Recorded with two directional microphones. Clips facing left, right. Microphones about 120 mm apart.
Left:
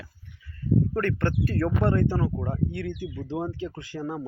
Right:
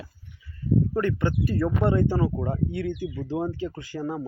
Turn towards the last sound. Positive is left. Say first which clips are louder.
# right 2 dB
turn(degrees=0)  # may be behind; listen again after turning